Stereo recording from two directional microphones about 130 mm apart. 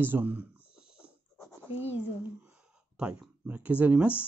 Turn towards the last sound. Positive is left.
turn(degrees=-10)  # may be behind; listen again after turning